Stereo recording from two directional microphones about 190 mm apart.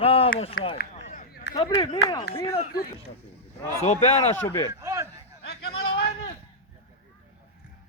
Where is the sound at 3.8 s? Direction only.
35° left (ahead or behind).